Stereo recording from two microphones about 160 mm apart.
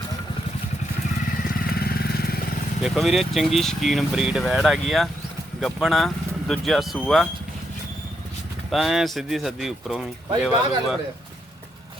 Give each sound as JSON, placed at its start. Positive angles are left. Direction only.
{"t": 1.5, "sound": "vehicle", "side_deg": 70}
{"t": 2.8, "sound": "speech", "side_deg": 0}
{"t": 8.7, "sound": "speech", "side_deg": 0}